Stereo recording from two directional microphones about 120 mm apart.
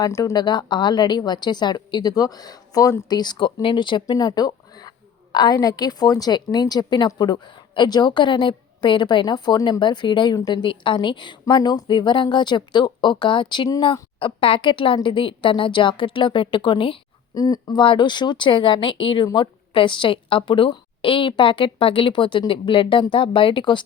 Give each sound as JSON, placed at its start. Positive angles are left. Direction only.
{"t": 0.0, "sound": "speech", "side_deg": 25}
{"t": 0.4, "sound": "speech", "side_deg": 40}
{"t": 3.1, "sound": "speech", "side_deg": 35}
{"t": 17.3, "sound": "speech", "side_deg": 30}